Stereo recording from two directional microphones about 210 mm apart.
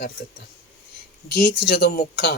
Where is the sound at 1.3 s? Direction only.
50° left (ahead or behind).